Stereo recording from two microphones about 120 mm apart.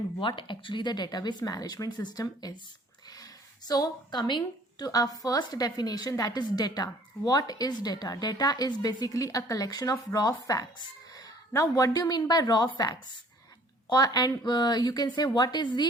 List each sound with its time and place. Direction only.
0.2 s a woman's voice: 45° left (ahead or behind)
3.7 s a woman's voice: 35° left (ahead or behind)